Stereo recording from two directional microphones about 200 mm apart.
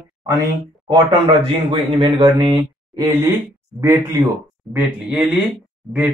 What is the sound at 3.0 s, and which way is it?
Speech, 10° right (ahead or behind).